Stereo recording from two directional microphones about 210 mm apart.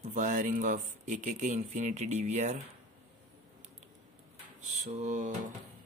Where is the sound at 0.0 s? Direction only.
40° right (ahead or behind).